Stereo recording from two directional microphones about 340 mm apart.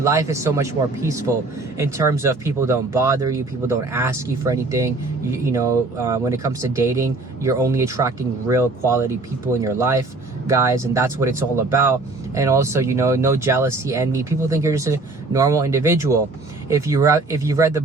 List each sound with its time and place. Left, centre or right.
0.0 s speech: centre